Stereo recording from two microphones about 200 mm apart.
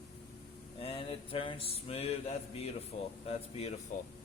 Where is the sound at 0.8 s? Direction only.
30° left (ahead or behind).